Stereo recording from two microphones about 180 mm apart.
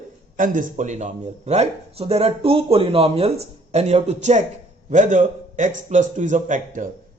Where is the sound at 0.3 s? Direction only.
50° right (ahead or behind).